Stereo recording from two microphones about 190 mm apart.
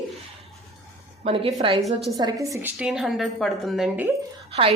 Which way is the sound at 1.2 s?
30° right (ahead or behind).